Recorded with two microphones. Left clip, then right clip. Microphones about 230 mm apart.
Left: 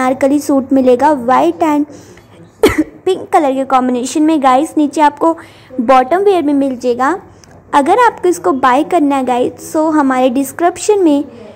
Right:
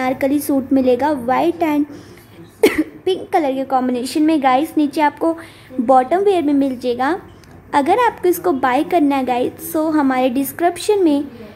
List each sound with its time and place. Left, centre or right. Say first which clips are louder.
0.0 s a woman's voice: left 6 dB; centre